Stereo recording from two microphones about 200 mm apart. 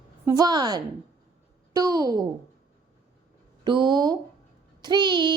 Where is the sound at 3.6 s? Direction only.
20° right (ahead or behind).